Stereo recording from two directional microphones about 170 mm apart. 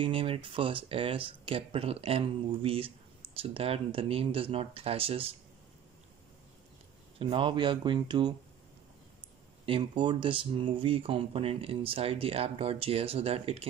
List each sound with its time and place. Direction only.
0.0 s speech: 30° right (ahead or behind)
7.2 s speech: 30° right (ahead or behind)
9.7 s speech: 30° right (ahead or behind)